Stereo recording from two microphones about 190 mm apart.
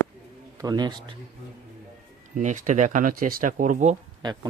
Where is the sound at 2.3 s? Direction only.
40° right (ahead or behind).